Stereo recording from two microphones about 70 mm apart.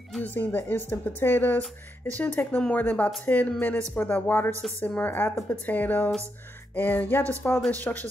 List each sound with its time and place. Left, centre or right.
0.2 s speech: left